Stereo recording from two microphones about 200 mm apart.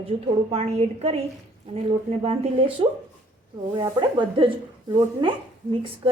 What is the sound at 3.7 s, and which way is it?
A woman's voice, 25° right (ahead or behind).